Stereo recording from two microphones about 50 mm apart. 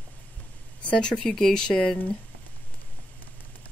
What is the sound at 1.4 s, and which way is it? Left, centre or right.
Speech, centre.